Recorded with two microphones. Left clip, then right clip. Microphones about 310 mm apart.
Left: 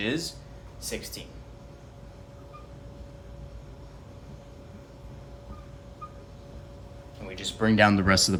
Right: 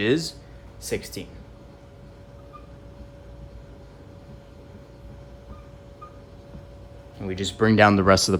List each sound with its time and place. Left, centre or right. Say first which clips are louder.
0.0 s speech: right 7 dB; right
7.3 s speech: right 5 dB; right; by 8.4 s centre